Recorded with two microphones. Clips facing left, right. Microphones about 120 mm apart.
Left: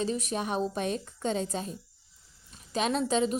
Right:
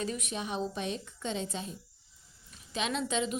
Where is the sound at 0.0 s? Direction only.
35° left (ahead or behind).